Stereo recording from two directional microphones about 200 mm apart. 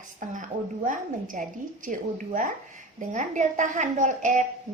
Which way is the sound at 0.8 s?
40° right (ahead or behind).